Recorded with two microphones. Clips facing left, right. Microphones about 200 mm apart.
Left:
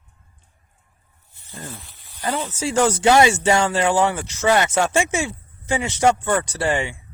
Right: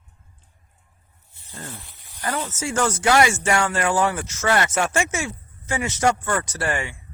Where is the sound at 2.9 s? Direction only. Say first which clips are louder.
Left 2 dB; 25° left (ahead or behind).